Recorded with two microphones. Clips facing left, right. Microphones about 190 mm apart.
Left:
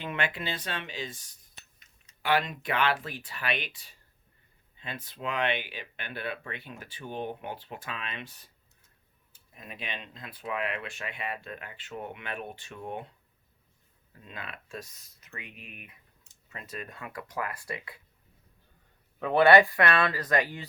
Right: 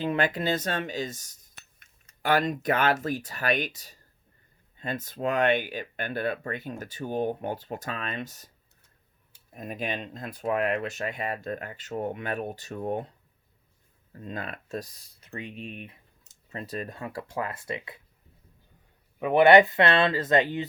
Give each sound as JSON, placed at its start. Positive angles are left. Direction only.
{"t": 0.0, "sound": "speech", "side_deg": -35}
{"t": 9.6, "sound": "speech", "side_deg": -45}
{"t": 14.1, "sound": "speech", "side_deg": -45}
{"t": 19.2, "sound": "speech", "side_deg": -15}